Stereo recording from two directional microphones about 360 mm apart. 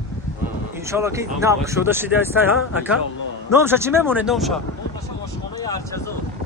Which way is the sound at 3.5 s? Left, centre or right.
Centre.